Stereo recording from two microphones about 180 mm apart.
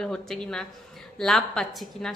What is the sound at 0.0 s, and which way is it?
A woman's voice, 5° left (ahead or behind).